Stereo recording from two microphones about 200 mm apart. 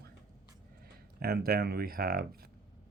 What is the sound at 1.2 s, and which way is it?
Speech, 50° right (ahead or behind).